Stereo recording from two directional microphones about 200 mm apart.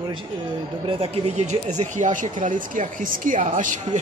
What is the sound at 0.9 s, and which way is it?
Speech, 30° right (ahead or behind).